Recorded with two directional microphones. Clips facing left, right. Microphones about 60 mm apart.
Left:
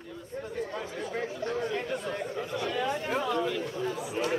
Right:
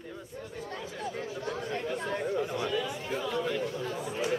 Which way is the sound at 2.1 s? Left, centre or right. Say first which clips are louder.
Right 3 dB; centre.